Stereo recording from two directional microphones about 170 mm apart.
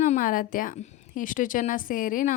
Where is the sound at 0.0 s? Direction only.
50° left (ahead or behind).